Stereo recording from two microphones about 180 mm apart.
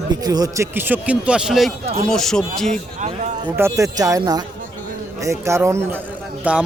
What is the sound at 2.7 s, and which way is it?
Speech, 40° right (ahead or behind).